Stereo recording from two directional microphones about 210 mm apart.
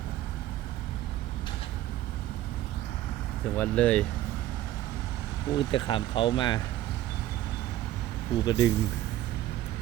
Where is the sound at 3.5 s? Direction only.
5° left (ahead or behind).